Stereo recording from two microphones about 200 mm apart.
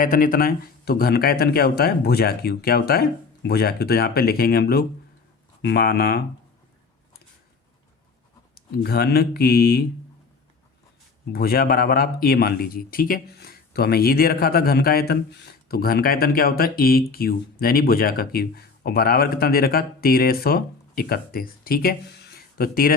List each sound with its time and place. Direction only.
0.0 s speech: 45° left (ahead or behind)
8.5 s speech: 50° left (ahead or behind)
11.3 s speech: 50° left (ahead or behind)